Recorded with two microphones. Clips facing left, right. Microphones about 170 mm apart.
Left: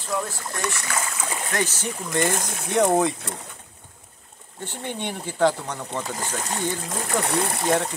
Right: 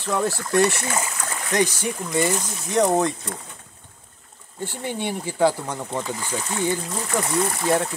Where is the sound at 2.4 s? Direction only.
55° left (ahead or behind).